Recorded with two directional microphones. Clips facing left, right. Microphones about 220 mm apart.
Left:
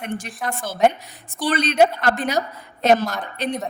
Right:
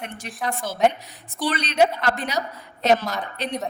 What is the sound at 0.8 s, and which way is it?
A woman's voice, 50° left (ahead or behind).